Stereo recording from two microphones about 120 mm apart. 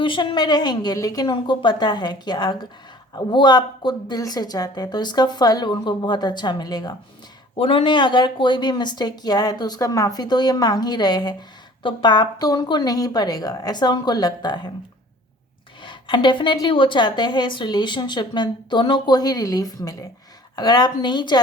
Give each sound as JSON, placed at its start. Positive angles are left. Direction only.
{"t": 0.0, "sound": "speech", "side_deg": 45}
{"t": 7.5, "sound": "speech", "side_deg": 50}
{"t": 15.8, "sound": "speech", "side_deg": 40}